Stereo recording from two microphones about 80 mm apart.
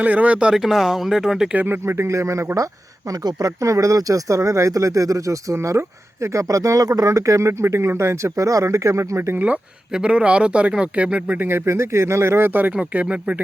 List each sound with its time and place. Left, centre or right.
0.0 s speech: centre
0.6 s speech: centre
1.5 s speech: right
3.1 s speech: right
9.3 s speech: centre